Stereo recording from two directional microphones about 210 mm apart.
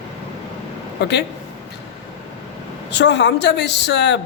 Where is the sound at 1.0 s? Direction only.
55° left (ahead or behind).